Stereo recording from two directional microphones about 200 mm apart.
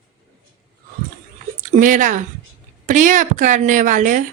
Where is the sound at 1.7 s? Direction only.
40° right (ahead or behind).